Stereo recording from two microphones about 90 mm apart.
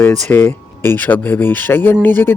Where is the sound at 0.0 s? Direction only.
20° left (ahead or behind).